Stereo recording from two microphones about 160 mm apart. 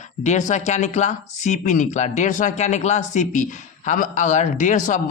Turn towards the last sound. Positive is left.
turn(degrees=50)  # may be behind; listen again after turning